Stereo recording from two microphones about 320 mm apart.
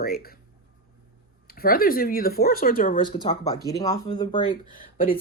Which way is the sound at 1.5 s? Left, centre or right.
Left.